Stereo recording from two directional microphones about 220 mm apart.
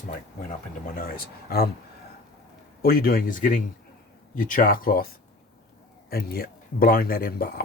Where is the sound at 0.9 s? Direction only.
40° left (ahead or behind).